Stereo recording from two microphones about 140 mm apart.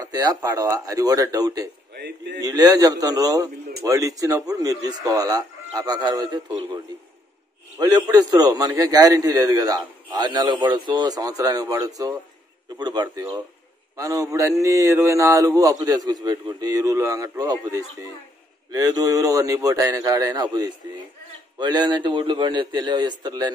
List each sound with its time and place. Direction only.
0.0 s a man's voice: 25° right (ahead or behind)
7.8 s a man's voice: 25° right (ahead or behind)